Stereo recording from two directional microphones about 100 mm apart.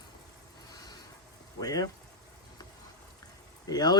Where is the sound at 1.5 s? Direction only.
35° left (ahead or behind).